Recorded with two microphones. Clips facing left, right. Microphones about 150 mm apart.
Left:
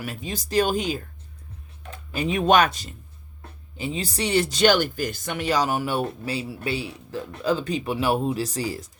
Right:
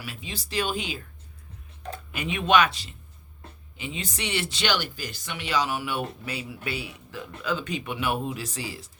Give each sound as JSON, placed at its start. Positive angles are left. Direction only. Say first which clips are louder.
{"t": 0.0, "sound": "speech", "louder": "left 6 dB", "side_deg": 45}
{"t": 2.1, "sound": "speech", "louder": "left 3 dB", "side_deg": 35}